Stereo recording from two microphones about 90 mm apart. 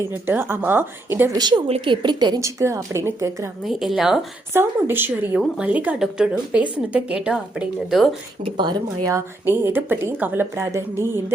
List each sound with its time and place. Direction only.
0.3 s a woman's voice: 25° right (ahead or behind)
1.3 s speech: 55° right (ahead or behind)
1.6 s a woman's voice: 80° right; by 2.4 s 50° right (ahead or behind)
2.4 s a woman's voice: 35° right (ahead or behind)
3.6 s speech: 5° right (ahead or behind)
4.5 s a woman's voice: 25° right (ahead or behind); by 8.1 s centre (ahead or behind)
8.4 s a woman's voice: 55° right (ahead or behind)
9.0 s a woman's voice: 30° right (ahead or behind)